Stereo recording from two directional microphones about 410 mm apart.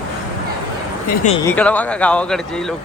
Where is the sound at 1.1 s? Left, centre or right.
Centre.